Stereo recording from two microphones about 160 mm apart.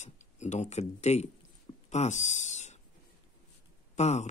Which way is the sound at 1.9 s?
45° left (ahead or behind).